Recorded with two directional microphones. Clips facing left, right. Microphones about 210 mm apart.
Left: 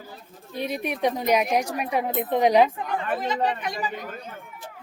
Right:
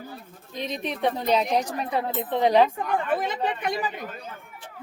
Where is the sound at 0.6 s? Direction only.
10° left (ahead or behind).